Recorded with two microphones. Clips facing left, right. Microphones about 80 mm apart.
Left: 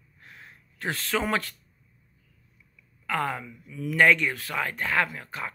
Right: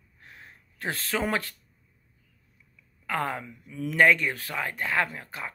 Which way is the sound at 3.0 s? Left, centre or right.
Right.